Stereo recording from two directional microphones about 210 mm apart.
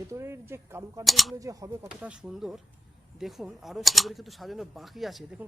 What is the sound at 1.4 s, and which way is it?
Speech, 15° right (ahead or behind).